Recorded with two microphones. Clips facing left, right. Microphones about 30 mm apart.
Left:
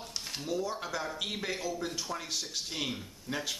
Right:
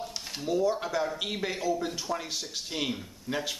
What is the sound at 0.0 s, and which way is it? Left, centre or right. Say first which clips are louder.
A man's voice: right 4 dB; centre.